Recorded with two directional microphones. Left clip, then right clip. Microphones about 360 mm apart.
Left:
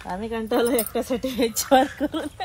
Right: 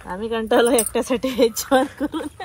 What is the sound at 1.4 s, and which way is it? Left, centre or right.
Speech, centre.